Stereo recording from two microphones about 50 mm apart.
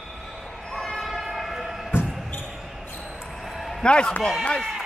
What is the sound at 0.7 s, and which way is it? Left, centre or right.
Train, centre.